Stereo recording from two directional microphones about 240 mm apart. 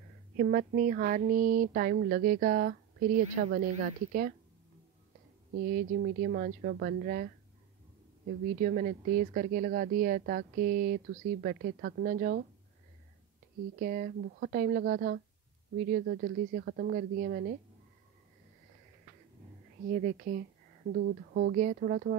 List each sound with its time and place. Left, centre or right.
0.4 s speech: right
5.5 s speech: right
8.5 s speech: right
13.7 s speech: right
19.9 s speech: right